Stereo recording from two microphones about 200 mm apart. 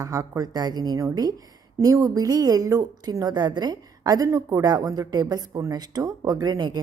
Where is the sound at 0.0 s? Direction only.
15° right (ahead or behind).